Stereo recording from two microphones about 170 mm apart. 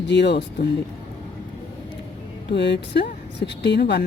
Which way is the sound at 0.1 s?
90° left.